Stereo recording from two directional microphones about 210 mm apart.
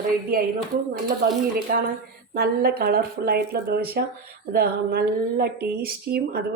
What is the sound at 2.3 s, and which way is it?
Speech, 45° right (ahead or behind).